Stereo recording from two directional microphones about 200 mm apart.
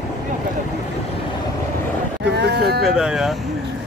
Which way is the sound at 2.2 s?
55° right (ahead or behind).